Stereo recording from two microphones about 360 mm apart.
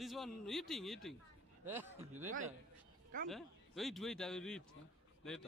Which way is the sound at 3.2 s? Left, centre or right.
Centre.